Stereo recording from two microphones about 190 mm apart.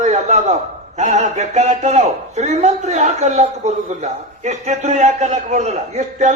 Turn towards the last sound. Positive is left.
turn(degrees=-35)  # may be behind; listen again after turning